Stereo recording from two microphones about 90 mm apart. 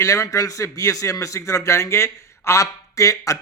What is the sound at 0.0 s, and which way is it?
A man's voice, 35° left (ahead or behind).